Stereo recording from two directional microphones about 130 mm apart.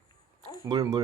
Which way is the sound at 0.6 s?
30° right (ahead or behind).